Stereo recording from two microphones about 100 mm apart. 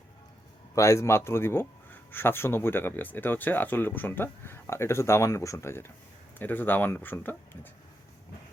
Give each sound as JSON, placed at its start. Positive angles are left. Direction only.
{"t": 0.8, "sound": "speech", "side_deg": 30}